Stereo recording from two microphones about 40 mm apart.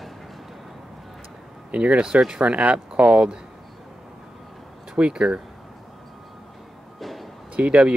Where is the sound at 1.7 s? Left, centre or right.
Right.